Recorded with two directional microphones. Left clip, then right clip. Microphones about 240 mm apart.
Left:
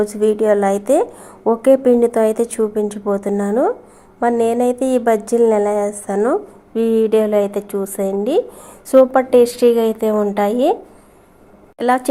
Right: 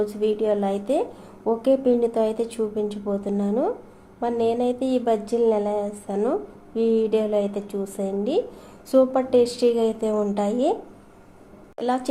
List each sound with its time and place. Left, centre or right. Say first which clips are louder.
0.2 s a woman's voice: left 9 dB; left
11.8 s a woman's voice: left 9 dB; left